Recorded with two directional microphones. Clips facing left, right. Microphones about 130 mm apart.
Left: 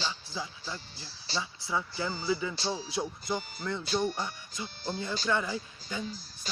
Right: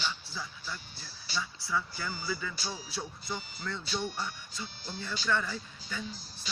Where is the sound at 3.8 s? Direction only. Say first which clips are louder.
Left 7 dB; 45° left (ahead or behind).